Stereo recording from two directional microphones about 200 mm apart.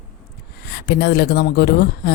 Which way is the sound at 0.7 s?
55° left (ahead or behind).